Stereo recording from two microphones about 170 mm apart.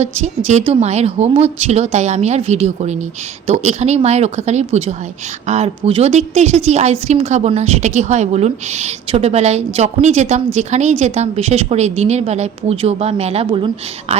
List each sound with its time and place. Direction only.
0.0 s a woman's voice: 40° right (ahead or behind)